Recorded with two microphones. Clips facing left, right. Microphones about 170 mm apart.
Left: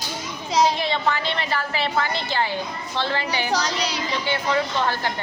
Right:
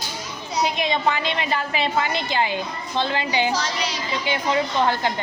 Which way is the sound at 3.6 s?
35° left (ahead or behind).